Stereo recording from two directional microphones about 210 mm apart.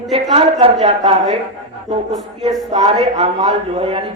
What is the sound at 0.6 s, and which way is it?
Speech, 25° right (ahead or behind).